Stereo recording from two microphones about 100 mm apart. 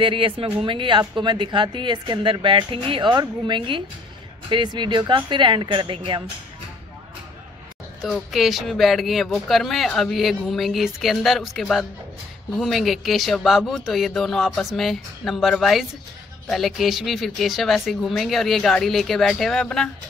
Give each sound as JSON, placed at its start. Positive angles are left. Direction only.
{"t": 0.0, "sound": "a woman's voice", "side_deg": -60}
{"t": 8.3, "sound": "a woman's voice", "side_deg": 0}